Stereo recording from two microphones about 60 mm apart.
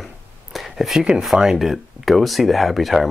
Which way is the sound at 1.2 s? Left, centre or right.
Centre.